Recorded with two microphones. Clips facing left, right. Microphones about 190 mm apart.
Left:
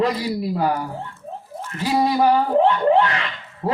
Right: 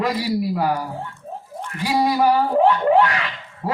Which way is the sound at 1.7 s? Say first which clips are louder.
Left 2 dB; 35° left (ahead or behind).